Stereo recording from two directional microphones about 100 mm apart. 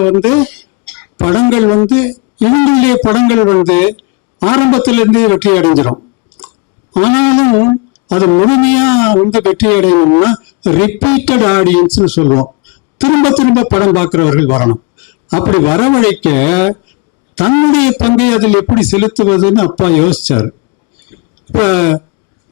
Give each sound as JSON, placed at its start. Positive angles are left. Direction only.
{"t": 0.0, "sound": "speech", "side_deg": 20}
{"t": 21.5, "sound": "speech", "side_deg": 20}